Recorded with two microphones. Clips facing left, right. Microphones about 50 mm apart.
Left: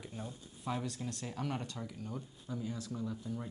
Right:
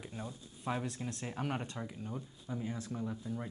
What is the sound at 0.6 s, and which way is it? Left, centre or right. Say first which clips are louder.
Speech: right 1 dB; right.